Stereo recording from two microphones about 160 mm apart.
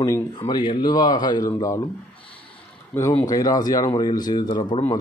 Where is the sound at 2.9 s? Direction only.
20° left (ahead or behind).